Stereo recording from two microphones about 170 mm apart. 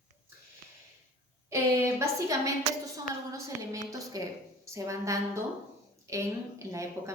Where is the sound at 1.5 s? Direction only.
15° right (ahead or behind).